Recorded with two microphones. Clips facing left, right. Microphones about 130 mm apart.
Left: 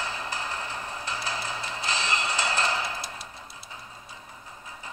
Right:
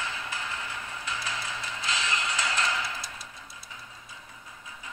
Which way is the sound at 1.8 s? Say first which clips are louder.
Left 2 dB; 35° left (ahead or behind).